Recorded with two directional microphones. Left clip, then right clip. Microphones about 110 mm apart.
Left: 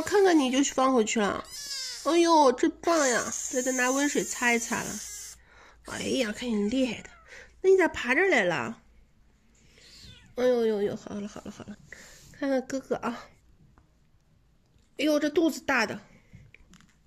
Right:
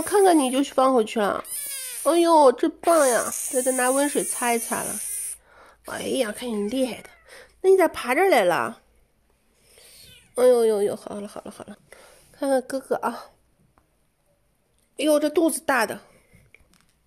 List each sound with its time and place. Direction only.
0.0 s speech: 30° right (ahead or behind)
3.4 s speech: 35° right (ahead or behind)
6.3 s speech: 35° right (ahead or behind); by 8.7 s 50° right (ahead or behind)
10.3 s speech: 50° right (ahead or behind)
11.9 s a sound: 25° right (ahead or behind)
12.9 s speech: 25° right (ahead or behind)
15.0 s a woman's voice: 35° right (ahead or behind)